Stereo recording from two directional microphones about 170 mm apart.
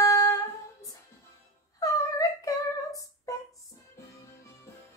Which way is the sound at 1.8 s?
20° left (ahead or behind).